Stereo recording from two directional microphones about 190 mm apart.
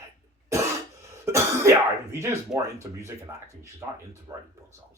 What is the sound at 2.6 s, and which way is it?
Speech, 15° right (ahead or behind).